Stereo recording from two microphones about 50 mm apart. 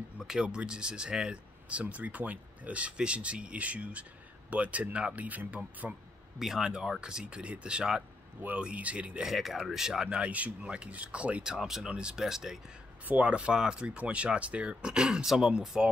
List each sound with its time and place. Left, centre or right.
0.2 s speech: centre; by 6.0 s right
6.4 s speech: centre; by 9.2 s right
9.2 s speech: centre
10.0 s speech: right
11.4 s speech: centre
11.9 s speech: right
12.2 s speech: centre
13.0 s speech: right; by 15.9 s centre